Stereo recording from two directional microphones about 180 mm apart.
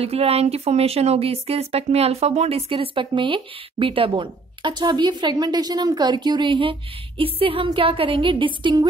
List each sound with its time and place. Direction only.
0.0 s speech: 35° right (ahead or behind)